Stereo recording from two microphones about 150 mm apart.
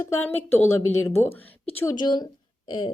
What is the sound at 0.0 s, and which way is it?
A woman's voice, 15° left (ahead or behind).